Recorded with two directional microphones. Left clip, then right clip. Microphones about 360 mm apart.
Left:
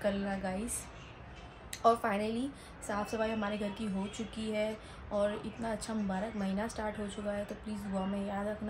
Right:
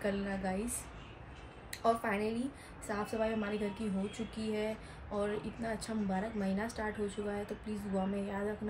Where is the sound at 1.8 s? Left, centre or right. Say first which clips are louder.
Left 3 dB; centre.